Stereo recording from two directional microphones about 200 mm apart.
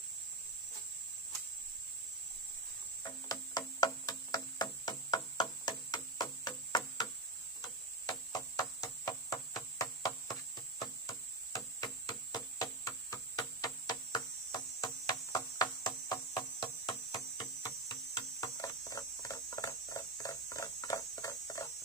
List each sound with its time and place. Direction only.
3.0 s music: 20° left (ahead or behind)
7.6 s a sound: 20° left (ahead or behind)
18.4 s mains hum: 15° left (ahead or behind)